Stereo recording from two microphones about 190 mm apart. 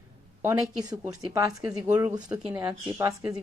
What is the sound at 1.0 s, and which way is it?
Speech, 15° right (ahead or behind).